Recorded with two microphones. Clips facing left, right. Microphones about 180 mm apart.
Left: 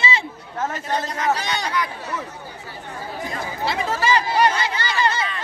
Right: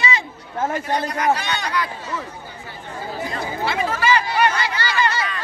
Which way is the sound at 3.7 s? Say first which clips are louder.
Right 1 dB; 30° left (ahead or behind).